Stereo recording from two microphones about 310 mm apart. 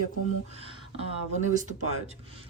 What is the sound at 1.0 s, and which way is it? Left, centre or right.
Speech, right.